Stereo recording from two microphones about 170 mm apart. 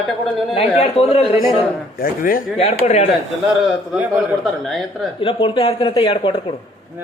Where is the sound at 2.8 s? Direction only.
40° left (ahead or behind).